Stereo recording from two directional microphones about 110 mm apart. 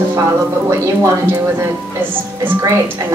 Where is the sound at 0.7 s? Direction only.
25° right (ahead or behind).